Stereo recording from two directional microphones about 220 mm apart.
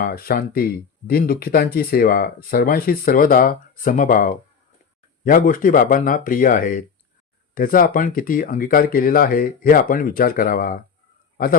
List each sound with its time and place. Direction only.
0.0 s speech: 45° left (ahead or behind)